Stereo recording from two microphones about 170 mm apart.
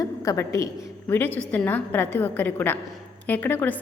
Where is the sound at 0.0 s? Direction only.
20° left (ahead or behind).